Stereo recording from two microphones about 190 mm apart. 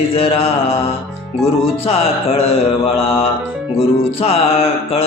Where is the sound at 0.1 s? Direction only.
30° left (ahead or behind).